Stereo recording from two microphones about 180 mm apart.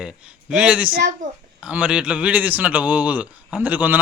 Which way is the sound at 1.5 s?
5° right (ahead or behind).